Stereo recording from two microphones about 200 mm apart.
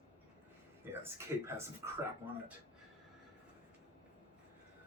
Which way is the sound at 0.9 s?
10° right (ahead or behind).